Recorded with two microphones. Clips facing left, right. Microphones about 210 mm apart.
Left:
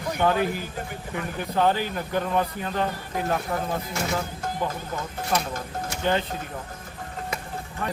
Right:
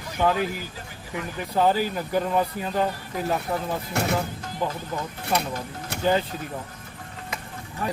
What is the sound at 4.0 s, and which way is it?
Speech, 65° right (ahead or behind).